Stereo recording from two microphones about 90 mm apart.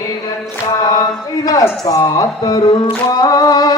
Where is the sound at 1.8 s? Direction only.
45° left (ahead or behind).